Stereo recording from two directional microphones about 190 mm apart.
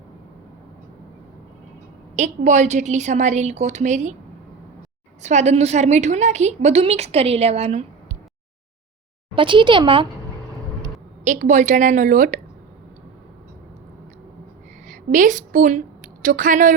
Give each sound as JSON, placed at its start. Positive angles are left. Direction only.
{"t": 2.1, "sound": "a woman's voice", "side_deg": -40}
{"t": 5.2, "sound": "a woman's voice", "side_deg": -35}
{"t": 9.3, "sound": "speech", "side_deg": -25}
{"t": 11.3, "sound": "a woman's voice", "side_deg": -40}
{"t": 14.8, "sound": "a woman's voice", "side_deg": -45}